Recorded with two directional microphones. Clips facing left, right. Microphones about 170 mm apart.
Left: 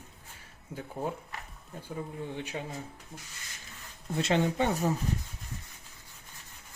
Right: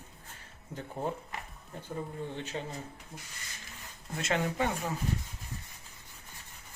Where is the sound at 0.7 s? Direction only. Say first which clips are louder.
Even; 5° left (ahead or behind).